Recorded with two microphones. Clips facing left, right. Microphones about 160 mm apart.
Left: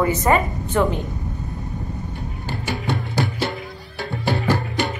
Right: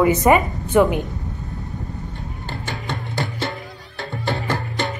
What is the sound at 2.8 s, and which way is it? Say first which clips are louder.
Music: left 4 dB; 20° right (ahead or behind).